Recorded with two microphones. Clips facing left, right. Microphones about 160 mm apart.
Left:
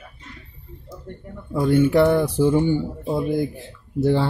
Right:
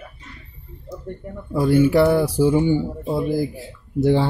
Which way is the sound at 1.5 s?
5° right (ahead or behind).